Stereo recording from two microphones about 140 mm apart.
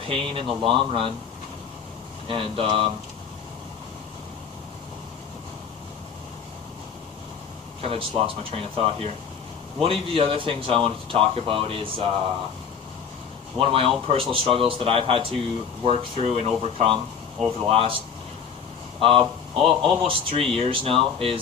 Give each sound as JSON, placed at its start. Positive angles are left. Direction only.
{"t": 0.1, "sound": "speech", "side_deg": -40}
{"t": 2.2, "sound": "speech", "side_deg": -40}
{"t": 7.8, "sound": "speech", "side_deg": -40}
{"t": 13.6, "sound": "speech", "side_deg": -40}